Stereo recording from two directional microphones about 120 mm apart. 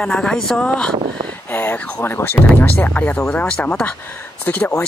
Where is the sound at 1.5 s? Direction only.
15° left (ahead or behind).